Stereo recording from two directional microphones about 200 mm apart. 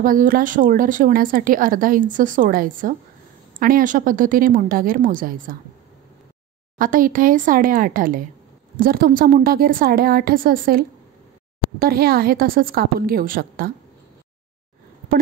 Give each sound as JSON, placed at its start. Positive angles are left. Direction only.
{"t": 0.0, "sound": "a woman's voice", "side_deg": -45}
{"t": 6.8, "sound": "a woman's voice", "side_deg": -45}